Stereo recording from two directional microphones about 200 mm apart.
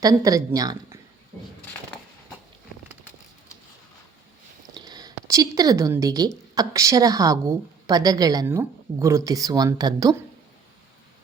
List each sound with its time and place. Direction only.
0.0 s a woman's voice: 20° right (ahead or behind)
1.3 s a sound: 10° left (ahead or behind)
4.7 s a woman's voice: 20° right (ahead or behind)